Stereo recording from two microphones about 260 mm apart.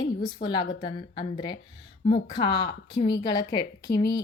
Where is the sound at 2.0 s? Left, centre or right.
Left.